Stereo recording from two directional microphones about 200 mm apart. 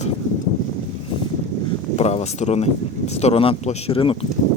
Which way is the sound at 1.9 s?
35° left (ahead or behind).